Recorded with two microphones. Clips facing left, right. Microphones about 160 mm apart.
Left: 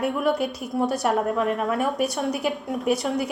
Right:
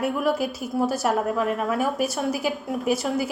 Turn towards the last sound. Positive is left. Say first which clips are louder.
# even
turn(degrees=0)  # may be behind; listen again after turning